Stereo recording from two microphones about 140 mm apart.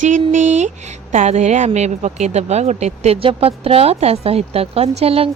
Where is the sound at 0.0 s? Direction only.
60° right (ahead or behind).